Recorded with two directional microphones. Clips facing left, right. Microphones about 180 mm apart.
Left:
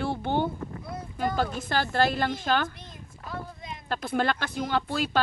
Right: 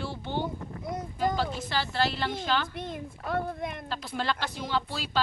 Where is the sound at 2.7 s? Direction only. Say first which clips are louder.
Right 11 dB; 60° right (ahead or behind).